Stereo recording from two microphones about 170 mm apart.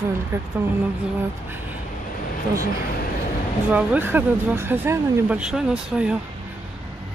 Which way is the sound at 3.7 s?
10° right (ahead or behind).